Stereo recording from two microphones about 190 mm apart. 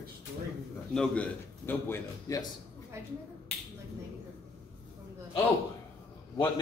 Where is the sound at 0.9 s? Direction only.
5° left (ahead or behind).